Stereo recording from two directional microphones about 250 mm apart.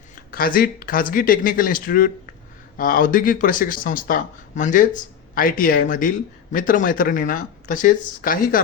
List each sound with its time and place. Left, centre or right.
0.3 s speech: left